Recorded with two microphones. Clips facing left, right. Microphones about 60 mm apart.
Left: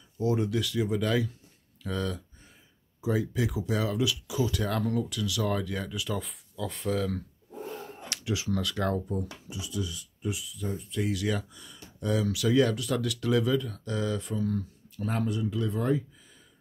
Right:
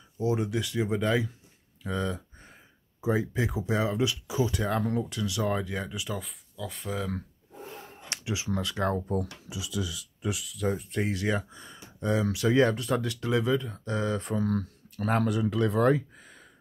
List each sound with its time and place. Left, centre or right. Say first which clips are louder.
0.2 s speech: left 1 dB; right
6.1 s speech: left 2 dB; centre
8.1 s speech: left 1 dB; right
9.1 s speech: right 3 dB; right
11.0 s speech: left 3 dB; right
14.3 s speech: right 2 dB; right
15.2 s speech: right 4 dB; right